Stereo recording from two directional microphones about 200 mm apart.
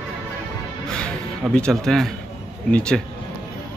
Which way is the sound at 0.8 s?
5° left (ahead or behind).